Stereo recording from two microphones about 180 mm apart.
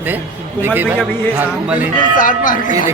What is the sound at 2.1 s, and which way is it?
Speech, 45° left (ahead or behind).